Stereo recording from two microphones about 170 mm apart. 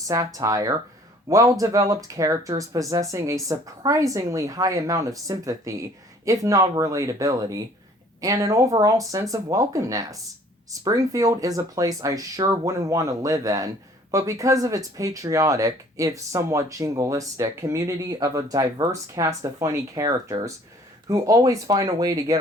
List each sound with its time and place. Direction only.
0.1 s speech: 20° right (ahead or behind)